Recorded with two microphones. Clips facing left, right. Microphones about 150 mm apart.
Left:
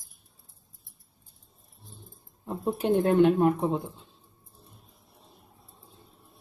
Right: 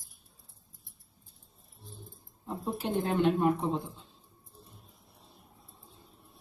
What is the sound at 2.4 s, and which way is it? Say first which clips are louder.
Speech: left 7 dB; 55° left (ahead or behind).